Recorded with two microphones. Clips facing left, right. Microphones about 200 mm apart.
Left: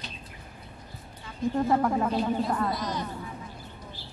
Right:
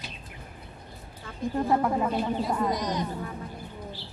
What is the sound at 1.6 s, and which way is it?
Speech, 5° right (ahead or behind).